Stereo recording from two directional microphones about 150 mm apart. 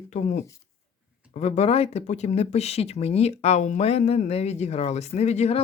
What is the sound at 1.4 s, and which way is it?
Speech, 45° left (ahead or behind).